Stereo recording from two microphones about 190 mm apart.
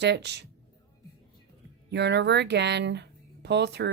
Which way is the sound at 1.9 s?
65° right (ahead or behind).